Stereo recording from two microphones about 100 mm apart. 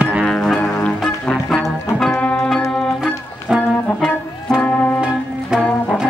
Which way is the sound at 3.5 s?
10° right (ahead or behind).